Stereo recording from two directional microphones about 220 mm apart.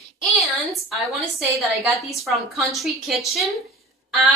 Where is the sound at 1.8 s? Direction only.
Centre (ahead or behind).